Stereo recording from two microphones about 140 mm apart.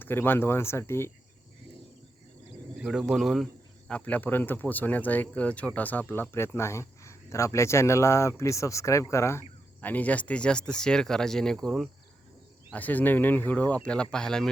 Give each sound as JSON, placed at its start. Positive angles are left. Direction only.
{"t": 0.0, "sound": "speech", "side_deg": 15}
{"t": 2.7, "sound": "speech", "side_deg": -5}
{"t": 12.7, "sound": "speech", "side_deg": 10}